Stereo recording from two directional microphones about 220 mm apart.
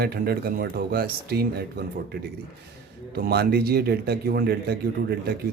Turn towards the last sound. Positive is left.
turn(degrees=-45)  # may be behind; listen again after turning